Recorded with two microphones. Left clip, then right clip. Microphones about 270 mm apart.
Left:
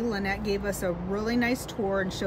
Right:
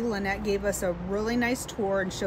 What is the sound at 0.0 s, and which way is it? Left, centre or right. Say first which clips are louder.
Speech: right 1 dB; centre.